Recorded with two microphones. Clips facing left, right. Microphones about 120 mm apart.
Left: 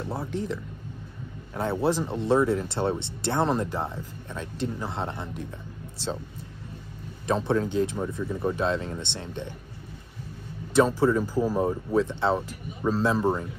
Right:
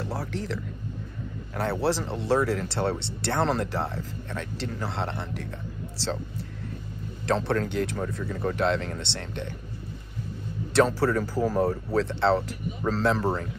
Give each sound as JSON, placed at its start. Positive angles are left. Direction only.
{"t": 0.1, "sound": "speech", "side_deg": 20}
{"t": 7.2, "sound": "speech", "side_deg": 15}
{"t": 10.7, "sound": "speech", "side_deg": 15}